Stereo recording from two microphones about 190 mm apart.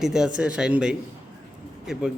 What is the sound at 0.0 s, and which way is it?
Speech, 5° right (ahead or behind).